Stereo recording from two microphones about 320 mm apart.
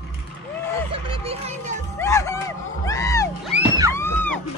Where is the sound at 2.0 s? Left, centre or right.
Centre.